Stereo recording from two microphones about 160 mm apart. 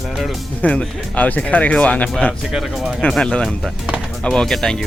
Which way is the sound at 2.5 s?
Centre (ahead or behind).